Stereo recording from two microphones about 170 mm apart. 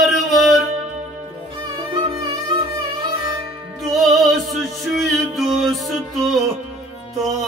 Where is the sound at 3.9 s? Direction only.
Centre (ahead or behind).